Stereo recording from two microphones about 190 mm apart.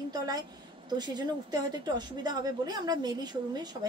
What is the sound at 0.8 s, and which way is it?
A woman's voice, 20° right (ahead or behind).